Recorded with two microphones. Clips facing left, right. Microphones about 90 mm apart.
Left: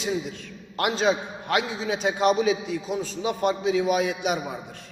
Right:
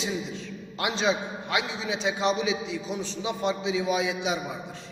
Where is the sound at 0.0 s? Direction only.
55° left (ahead or behind).